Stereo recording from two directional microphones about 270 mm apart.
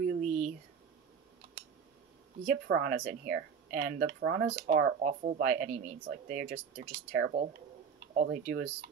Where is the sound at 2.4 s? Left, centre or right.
Right.